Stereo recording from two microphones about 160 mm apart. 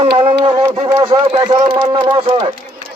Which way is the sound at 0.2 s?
35° right (ahead or behind).